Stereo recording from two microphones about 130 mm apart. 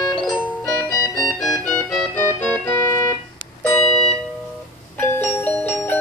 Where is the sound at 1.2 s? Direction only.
5° left (ahead or behind).